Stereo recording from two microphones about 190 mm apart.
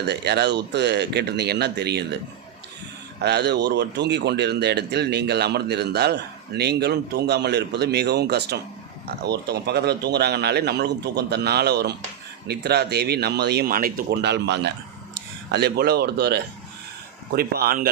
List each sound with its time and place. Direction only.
0.1 s speech: 60° right (ahead or behind)
3.2 s speech: 60° right (ahead or behind)